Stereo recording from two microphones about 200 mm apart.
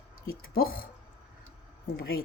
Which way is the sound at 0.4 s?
45° left (ahead or behind).